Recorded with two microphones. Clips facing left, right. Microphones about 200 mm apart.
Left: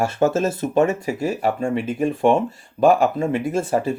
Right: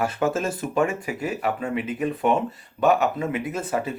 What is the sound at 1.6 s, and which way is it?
Speech, 45° left (ahead or behind).